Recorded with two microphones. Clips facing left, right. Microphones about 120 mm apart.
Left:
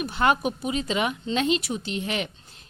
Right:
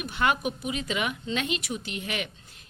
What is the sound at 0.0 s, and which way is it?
A woman's voice, 35° left (ahead or behind).